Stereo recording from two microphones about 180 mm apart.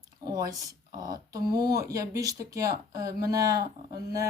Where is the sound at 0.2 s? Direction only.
20° right (ahead or behind).